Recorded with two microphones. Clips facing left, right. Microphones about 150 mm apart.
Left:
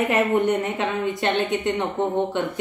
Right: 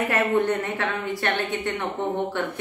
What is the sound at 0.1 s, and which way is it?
A woman's voice, 20° left (ahead or behind).